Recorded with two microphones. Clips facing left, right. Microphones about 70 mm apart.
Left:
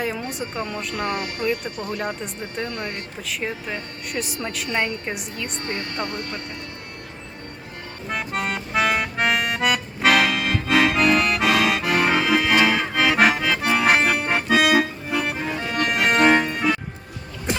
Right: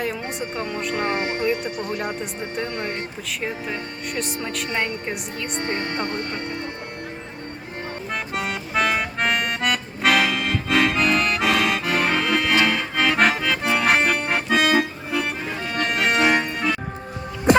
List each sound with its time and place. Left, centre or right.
0.9 s speech: right
2.6 s speech: right
3.2 s speech: centre
5.6 s speech: right
8.1 s music: centre